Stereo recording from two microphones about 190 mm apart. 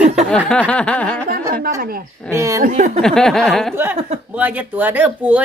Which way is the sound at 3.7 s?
10° right (ahead or behind).